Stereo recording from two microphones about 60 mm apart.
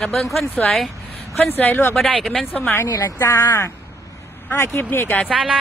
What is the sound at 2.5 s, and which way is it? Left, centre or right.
Speech, left.